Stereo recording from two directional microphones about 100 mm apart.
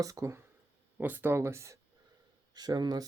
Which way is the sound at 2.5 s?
40° right (ahead or behind).